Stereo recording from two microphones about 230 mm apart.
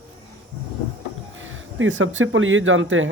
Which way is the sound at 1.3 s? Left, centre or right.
Right.